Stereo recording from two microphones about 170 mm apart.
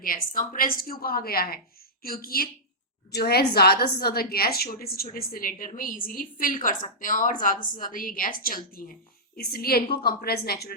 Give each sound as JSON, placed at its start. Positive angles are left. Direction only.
{"t": 0.0, "sound": "a woman's voice", "side_deg": 55}